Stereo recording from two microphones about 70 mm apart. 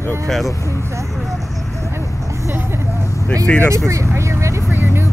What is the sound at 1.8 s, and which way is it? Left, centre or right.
Vehicle, right.